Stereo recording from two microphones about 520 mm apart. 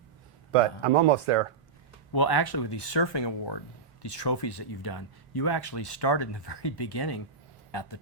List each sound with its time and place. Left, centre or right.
0.8 s speech: right
2.1 s speech: left